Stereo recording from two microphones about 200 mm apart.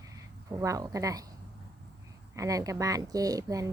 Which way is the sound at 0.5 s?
15° right (ahead or behind).